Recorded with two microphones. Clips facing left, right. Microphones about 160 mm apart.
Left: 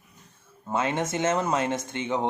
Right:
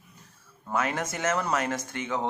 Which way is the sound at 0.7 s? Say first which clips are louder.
Left 2 dB; 25° left (ahead or behind).